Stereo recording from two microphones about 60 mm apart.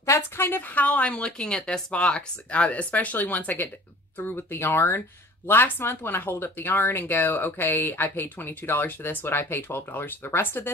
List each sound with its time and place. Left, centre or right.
0.4 s speech: left